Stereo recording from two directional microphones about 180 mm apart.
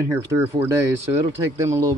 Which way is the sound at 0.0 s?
15° right (ahead or behind).